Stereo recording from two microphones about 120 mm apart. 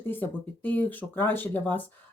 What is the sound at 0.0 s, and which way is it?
Speech, 15° left (ahead or behind).